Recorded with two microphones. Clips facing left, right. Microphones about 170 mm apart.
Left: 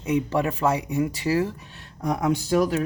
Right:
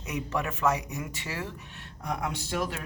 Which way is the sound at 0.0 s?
30° left (ahead or behind).